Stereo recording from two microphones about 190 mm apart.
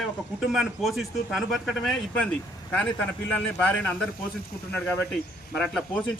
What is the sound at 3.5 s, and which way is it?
A man's voice, 10° left (ahead or behind).